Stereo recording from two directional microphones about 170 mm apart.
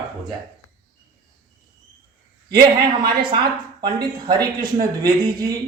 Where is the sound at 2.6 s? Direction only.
25° right (ahead or behind).